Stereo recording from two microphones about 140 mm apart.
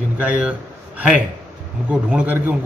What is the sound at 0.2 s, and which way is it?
A man's voice, 10° right (ahead or behind).